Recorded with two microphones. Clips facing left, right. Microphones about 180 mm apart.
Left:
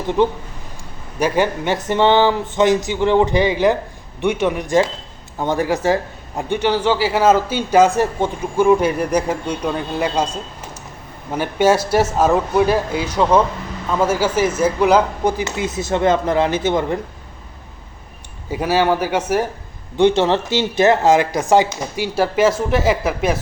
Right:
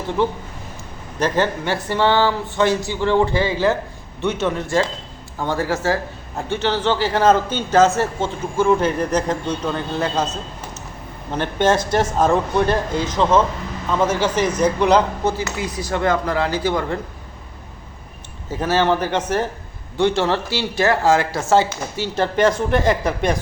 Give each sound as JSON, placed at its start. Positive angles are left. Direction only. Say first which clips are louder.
{"t": 0.2, "sound": "a man's voice", "louder": "left 3 dB", "side_deg": 20}
{"t": 15.4, "sound": "speech", "louder": "left 3 dB", "side_deg": 25}
{"t": 18.5, "sound": "a man's voice", "louder": "left 1 dB", "side_deg": 10}